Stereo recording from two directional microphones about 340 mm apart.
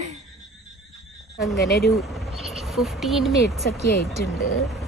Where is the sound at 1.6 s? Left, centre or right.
Left.